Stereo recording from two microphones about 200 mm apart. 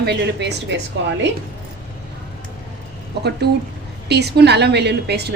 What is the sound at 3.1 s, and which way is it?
A woman's voice, 55° right (ahead or behind).